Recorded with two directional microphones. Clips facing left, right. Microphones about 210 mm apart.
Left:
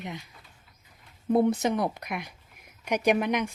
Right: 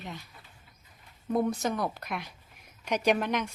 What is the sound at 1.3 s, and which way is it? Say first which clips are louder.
A woman's voice: left 4 dB; 25° left (ahead or behind).